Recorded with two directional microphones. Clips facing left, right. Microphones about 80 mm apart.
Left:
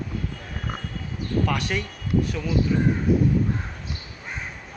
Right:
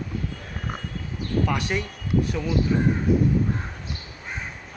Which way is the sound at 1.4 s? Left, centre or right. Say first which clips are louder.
Right 1 dB; centre.